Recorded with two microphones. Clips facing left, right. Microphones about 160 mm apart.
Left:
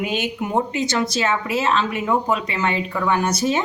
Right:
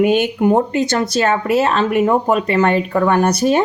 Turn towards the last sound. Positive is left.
turn(degrees=-55)  # may be behind; listen again after turning